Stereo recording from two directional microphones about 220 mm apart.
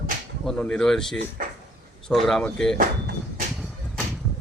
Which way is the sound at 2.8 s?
40° right (ahead or behind).